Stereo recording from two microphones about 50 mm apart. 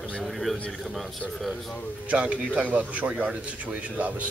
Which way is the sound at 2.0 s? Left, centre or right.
Right.